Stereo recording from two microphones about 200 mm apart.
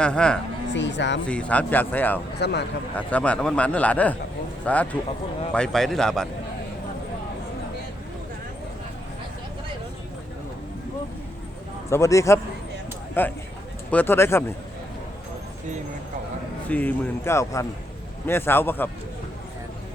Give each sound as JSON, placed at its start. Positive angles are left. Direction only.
{"t": 0.0, "sound": "a man's voice", "side_deg": 5}
{"t": 0.7, "sound": "speech", "side_deg": 60}
{"t": 1.3, "sound": "a man's voice", "side_deg": 5}
{"t": 2.4, "sound": "speech", "side_deg": 55}
{"t": 2.9, "sound": "a man's voice", "side_deg": 5}
{"t": 11.9, "sound": "a man's voice", "side_deg": 15}
{"t": 16.6, "sound": "a man's voice", "side_deg": 10}